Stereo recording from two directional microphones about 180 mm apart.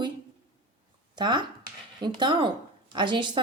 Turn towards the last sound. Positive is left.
turn(degrees=-25)  # may be behind; listen again after turning